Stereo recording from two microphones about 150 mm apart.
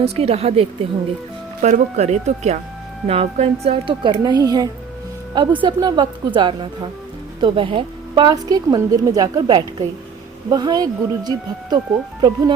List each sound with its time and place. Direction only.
0.0 s a woman's voice: 40° right (ahead or behind); by 11.8 s 25° right (ahead or behind)